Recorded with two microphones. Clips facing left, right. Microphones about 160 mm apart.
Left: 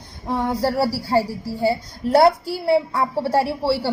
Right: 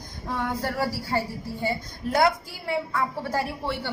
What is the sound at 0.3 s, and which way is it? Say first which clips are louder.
A woman's voice: left 7 dB; 35° left (ahead or behind).